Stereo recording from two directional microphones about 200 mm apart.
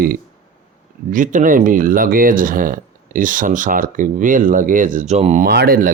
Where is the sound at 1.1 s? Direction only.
40° right (ahead or behind).